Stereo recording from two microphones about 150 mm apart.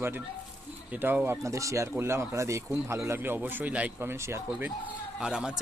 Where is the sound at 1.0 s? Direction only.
15° right (ahead or behind).